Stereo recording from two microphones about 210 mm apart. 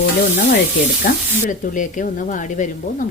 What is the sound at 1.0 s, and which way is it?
Speech, 35° left (ahead or behind).